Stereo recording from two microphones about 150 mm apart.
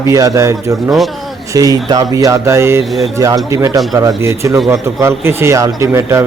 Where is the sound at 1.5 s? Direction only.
25° right (ahead or behind).